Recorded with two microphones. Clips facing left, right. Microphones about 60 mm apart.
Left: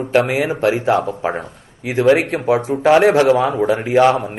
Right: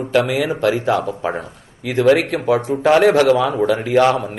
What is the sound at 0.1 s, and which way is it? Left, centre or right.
Speech, left.